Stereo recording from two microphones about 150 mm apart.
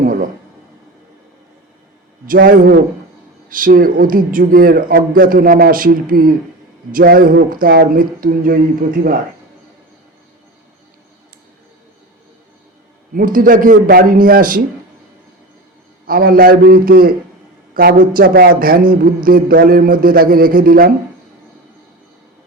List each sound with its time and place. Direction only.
0.0 s speech: 60° right (ahead or behind)
2.2 s speech: 70° right (ahead or behind)
13.1 s speech: 70° right (ahead or behind)
16.0 s a man's voice: 80° right